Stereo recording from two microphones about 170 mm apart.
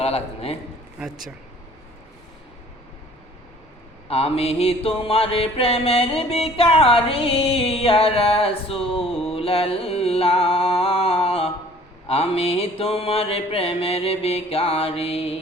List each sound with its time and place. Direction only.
0.0 s mantra: 35° left (ahead or behind)
0.9 s speech: 5° right (ahead or behind)
4.1 s mantra: 35° left (ahead or behind)